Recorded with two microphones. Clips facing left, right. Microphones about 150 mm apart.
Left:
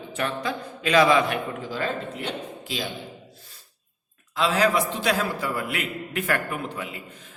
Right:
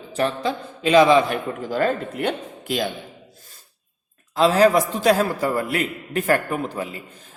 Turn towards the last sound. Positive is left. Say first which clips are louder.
# right 5 dB
turn(degrees=-35)  # may be behind; listen again after turning